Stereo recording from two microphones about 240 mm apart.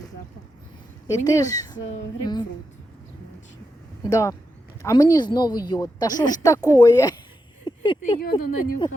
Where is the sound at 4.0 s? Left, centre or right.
Centre.